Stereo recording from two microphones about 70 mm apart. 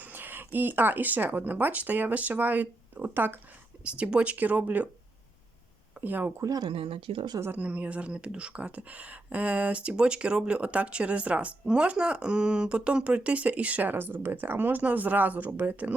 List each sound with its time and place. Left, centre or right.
0.0 s speech: right
3.8 s speech: centre
6.0 s speech: right
6.3 s speech: right
7.5 s speech: right